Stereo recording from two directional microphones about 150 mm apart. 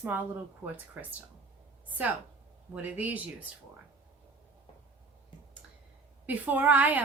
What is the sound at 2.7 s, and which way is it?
Speech, 10° right (ahead or behind).